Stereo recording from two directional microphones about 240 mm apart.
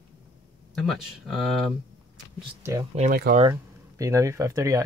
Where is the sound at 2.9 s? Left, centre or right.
Right.